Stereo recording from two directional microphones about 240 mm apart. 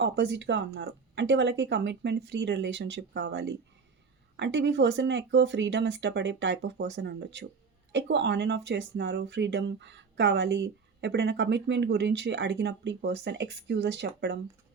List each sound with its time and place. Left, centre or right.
0.0 s speech: right